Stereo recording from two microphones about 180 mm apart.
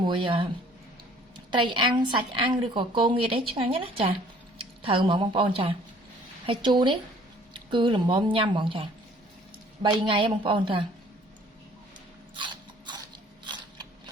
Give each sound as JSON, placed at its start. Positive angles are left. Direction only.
{"t": 0.0, "sound": "a woman's voice", "side_deg": -25}
{"t": 12.4, "sound": "a sound", "side_deg": -25}
{"t": 13.4, "sound": "mechanisms", "side_deg": -25}